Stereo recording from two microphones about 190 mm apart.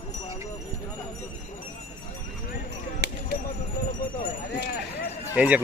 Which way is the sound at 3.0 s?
65° right (ahead or behind).